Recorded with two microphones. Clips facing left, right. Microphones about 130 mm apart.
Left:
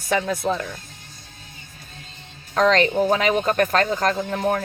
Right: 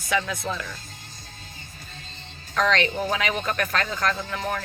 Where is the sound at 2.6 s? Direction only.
40° left (ahead or behind).